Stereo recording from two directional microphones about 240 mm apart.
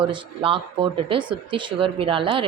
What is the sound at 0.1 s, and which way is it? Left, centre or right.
Speech, right.